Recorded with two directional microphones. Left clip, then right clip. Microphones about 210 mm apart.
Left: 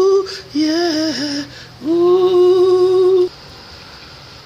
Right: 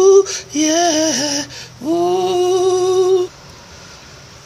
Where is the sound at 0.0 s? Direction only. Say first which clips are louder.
Right 4 dB; 5° left (ahead or behind).